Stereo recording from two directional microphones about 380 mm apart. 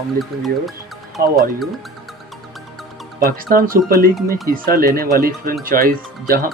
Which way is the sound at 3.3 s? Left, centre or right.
Right.